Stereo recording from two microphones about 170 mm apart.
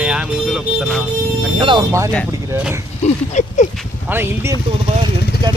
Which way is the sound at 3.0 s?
45° left (ahead or behind).